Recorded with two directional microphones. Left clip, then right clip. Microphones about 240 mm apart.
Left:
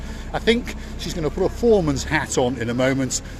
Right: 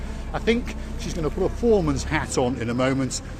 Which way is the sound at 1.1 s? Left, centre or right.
Centre.